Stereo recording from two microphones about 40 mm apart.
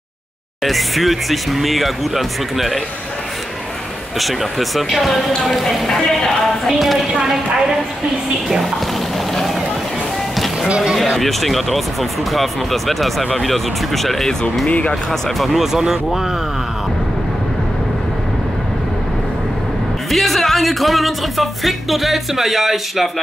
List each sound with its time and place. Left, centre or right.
0.7 s speech: centre
4.2 s speech: centre
7.1 s a woman's voice: centre
10.3 s music: centre
10.7 s speech: centre
11.1 s speech: centre
14.7 s speech: left
15.0 s speech: centre
20.1 s speech: centre